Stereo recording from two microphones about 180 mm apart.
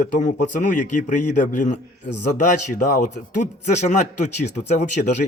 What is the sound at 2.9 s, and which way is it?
Speech, 40° left (ahead or behind).